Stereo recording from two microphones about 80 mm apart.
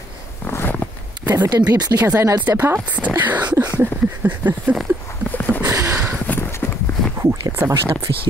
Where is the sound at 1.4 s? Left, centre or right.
Right.